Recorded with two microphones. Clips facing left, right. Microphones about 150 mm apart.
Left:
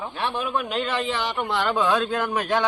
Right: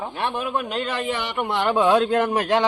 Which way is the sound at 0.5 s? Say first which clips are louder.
Even; centre (ahead or behind).